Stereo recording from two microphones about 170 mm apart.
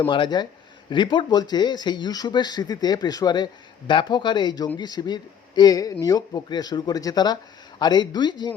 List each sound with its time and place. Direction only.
0.0 s speech: 30° left (ahead or behind)